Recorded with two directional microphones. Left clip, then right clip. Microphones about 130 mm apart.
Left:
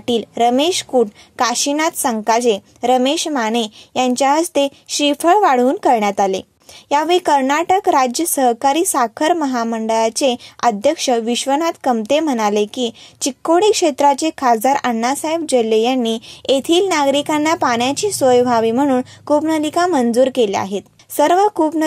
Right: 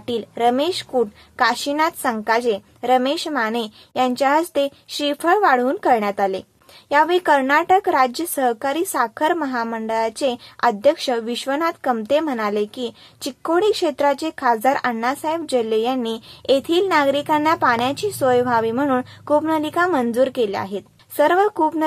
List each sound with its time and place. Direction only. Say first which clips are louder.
0.0 s speech: left 4 dB; 45° left (ahead or behind)